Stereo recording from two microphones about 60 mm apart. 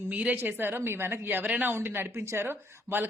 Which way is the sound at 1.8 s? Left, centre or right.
Right.